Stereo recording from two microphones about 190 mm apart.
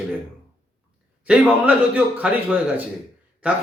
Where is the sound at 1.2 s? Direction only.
10° right (ahead or behind).